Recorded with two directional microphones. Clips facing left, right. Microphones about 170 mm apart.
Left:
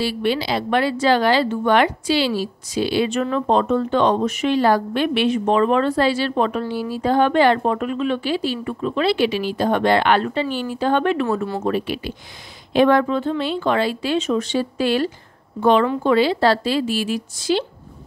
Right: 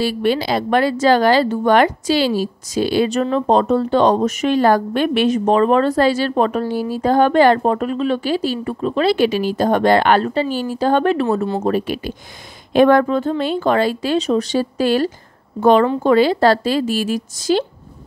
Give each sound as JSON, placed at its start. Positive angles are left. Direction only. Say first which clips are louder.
{"t": 0.0, "sound": "speech", "louder": "right 3 dB", "side_deg": -45}